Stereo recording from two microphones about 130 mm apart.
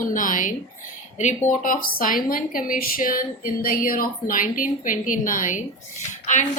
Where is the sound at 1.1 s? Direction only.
70° left (ahead or behind); by 5.6 s 90° left.